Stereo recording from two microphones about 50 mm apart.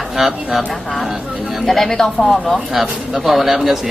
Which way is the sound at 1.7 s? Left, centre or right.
Centre.